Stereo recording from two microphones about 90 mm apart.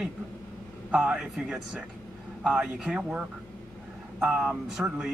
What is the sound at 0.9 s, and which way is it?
Speech, 10° right (ahead or behind).